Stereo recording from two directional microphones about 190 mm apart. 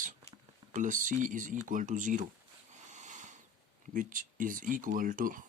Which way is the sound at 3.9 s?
45° right (ahead or behind).